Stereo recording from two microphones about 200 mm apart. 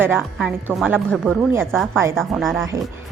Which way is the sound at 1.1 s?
5° left (ahead or behind).